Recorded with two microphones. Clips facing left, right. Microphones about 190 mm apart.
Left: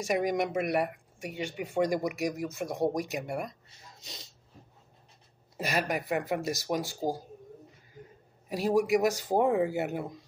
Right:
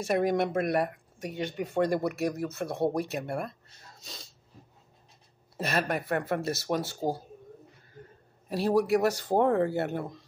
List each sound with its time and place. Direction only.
0.0 s speech: 10° left (ahead or behind)
5.6 s a man's voice: 15° left (ahead or behind)